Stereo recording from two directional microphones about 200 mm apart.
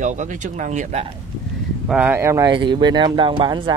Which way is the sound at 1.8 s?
5° right (ahead or behind).